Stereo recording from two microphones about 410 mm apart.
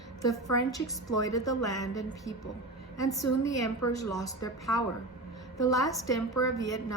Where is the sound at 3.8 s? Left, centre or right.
Left.